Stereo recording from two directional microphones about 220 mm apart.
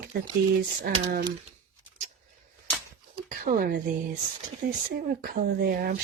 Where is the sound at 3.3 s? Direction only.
40° right (ahead or behind).